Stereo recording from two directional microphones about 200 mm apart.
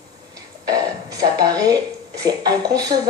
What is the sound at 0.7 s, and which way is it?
Speech, 20° right (ahead or behind).